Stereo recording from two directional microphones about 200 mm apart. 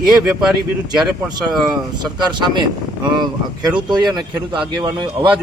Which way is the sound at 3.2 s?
20° right (ahead or behind).